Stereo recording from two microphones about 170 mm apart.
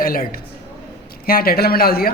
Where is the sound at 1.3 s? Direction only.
60° left (ahead or behind).